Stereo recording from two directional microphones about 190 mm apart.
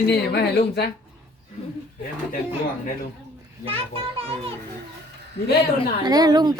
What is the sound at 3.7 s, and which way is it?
Speech, 30° right (ahead or behind).